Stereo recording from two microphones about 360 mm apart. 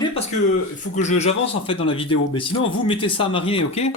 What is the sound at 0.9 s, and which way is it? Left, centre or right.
Speech, centre.